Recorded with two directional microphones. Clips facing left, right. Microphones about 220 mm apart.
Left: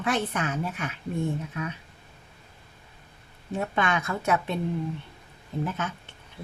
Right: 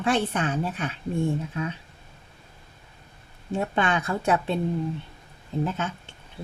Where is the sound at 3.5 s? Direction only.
30° right (ahead or behind).